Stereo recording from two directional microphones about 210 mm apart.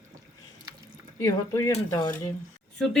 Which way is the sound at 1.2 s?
15° left (ahead or behind).